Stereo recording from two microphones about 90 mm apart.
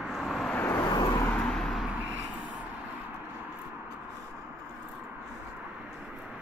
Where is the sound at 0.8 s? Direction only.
45° left (ahead or behind).